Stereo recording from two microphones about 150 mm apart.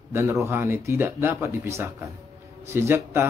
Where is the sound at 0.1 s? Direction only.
15° right (ahead or behind).